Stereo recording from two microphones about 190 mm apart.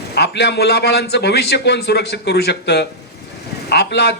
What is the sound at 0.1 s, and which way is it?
A man's voice, 60° left (ahead or behind).